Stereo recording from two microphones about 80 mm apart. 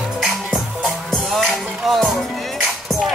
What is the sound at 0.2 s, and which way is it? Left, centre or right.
Music, centre.